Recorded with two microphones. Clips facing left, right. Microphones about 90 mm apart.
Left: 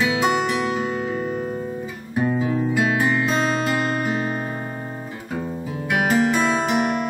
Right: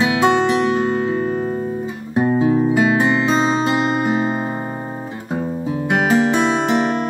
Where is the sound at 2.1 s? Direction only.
25° right (ahead or behind).